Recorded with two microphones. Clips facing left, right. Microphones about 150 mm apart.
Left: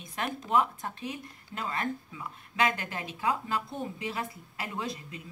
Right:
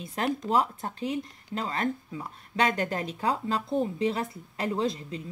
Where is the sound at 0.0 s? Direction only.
35° right (ahead or behind).